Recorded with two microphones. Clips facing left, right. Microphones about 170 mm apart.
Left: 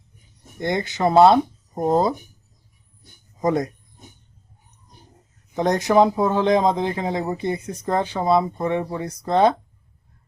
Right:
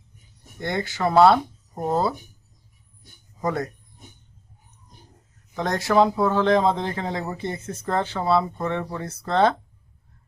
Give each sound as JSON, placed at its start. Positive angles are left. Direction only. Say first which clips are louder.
{"t": 0.6, "sound": "speech", "louder": "left 3 dB", "side_deg": 20}
{"t": 3.4, "sound": "speech", "louder": "left 5 dB", "side_deg": 15}
{"t": 5.5, "sound": "speech", "louder": "left 3 dB", "side_deg": 20}